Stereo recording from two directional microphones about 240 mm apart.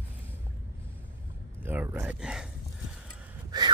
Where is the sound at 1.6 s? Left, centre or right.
Centre.